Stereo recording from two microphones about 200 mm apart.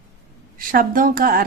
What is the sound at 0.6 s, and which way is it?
Speech, 45° right (ahead or behind).